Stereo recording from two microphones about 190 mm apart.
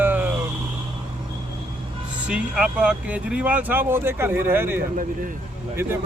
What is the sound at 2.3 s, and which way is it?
Speech, 5° right (ahead or behind).